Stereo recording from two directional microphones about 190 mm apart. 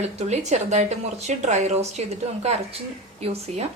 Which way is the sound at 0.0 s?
35° right (ahead or behind).